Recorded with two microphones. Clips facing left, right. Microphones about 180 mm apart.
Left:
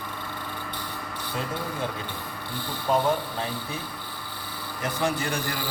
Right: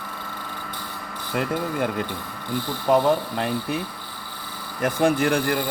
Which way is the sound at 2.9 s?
65° right (ahead or behind).